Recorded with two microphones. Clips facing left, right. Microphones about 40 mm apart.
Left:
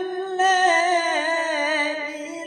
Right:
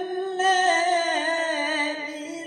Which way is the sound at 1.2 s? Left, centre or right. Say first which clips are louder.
Left 2 dB; centre.